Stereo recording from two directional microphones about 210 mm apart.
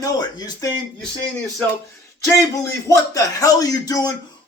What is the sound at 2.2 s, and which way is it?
Speech, 15° left (ahead or behind).